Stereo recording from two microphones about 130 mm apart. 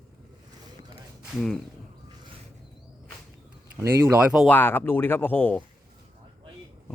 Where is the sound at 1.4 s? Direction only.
5° left (ahead or behind).